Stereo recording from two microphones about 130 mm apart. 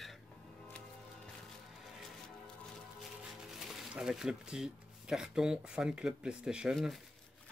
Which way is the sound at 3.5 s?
5° right (ahead or behind).